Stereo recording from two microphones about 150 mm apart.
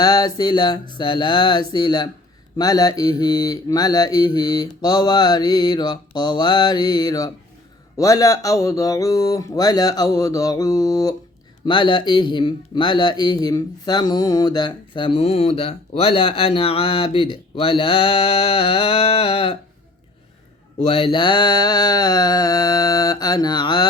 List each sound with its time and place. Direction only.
0.0 s mantra: 25° left (ahead or behind)
11.6 s speech: 30° left (ahead or behind)
20.7 s mantra: 40° left (ahead or behind)